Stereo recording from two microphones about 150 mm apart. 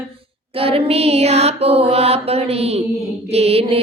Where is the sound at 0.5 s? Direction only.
40° right (ahead or behind).